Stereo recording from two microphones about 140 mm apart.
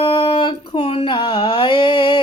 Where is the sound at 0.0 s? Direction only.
35° left (ahead or behind).